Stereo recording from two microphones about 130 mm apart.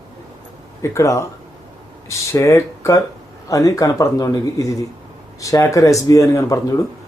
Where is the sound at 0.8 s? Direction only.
25° left (ahead or behind).